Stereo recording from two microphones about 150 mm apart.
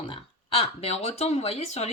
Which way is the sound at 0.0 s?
35° left (ahead or behind).